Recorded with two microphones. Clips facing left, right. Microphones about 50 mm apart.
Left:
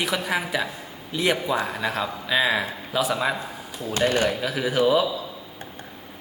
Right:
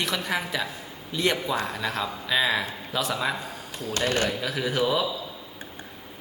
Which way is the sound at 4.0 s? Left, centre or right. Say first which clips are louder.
Left 4 dB; left.